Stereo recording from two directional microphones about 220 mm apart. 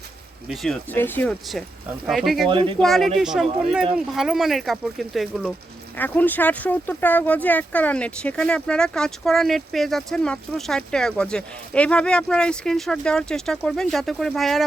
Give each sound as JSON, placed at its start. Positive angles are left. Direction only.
{"t": 0.4, "sound": "speech", "side_deg": 0}
{"t": 2.5, "sound": "speech", "side_deg": -25}
{"t": 2.8, "sound": "speech", "side_deg": 0}